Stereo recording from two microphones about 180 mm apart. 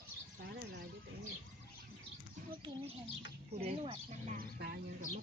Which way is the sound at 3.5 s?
35° right (ahead or behind).